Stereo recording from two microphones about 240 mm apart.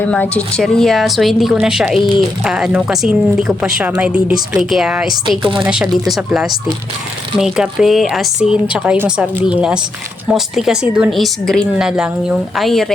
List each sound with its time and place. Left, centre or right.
0.0 s a woman's voice: centre